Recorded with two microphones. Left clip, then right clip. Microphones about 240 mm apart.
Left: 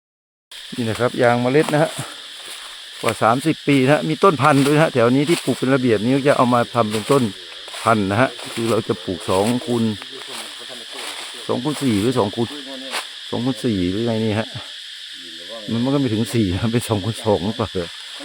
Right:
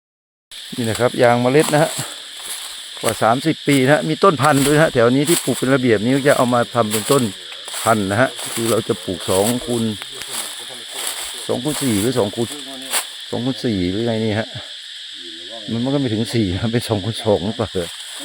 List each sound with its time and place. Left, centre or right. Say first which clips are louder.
0.9 s speech: right 2 dB; centre
7.9 s speech: right 1 dB; centre
9.3 s speech: right 1 dB; centre
11.4 s speech: right 1 dB; centre
11.7 s speech: right 1 dB; right
12.1 s speech: right 1 dB; centre
15.7 s speech: even; centre